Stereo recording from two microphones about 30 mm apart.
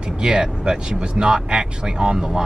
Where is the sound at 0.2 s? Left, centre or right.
Right.